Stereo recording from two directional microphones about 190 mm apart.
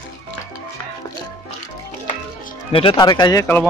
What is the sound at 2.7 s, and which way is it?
Speech, 30° left (ahead or behind).